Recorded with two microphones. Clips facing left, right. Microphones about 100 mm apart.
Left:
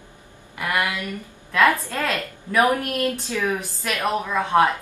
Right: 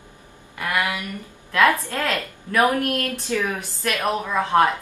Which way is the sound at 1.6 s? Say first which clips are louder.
Even; 15° left (ahead or behind).